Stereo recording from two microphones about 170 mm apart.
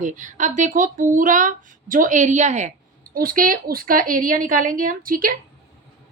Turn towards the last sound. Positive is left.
turn(degrees=-55)  # may be behind; listen again after turning